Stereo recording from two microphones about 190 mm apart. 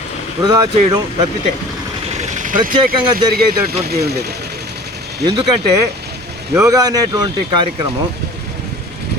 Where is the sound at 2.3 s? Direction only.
45° right (ahead or behind).